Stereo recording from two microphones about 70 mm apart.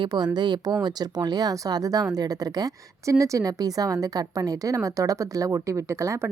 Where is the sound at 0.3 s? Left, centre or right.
Right.